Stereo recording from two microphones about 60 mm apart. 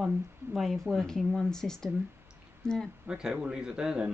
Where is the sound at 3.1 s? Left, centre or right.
Centre.